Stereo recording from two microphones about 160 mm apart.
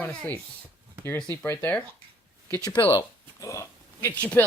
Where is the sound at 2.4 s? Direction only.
20° left (ahead or behind).